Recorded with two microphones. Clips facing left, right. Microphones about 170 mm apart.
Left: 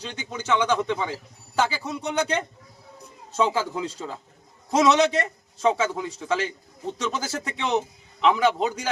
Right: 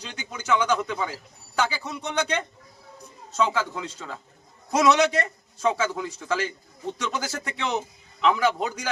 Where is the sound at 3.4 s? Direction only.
30° left (ahead or behind).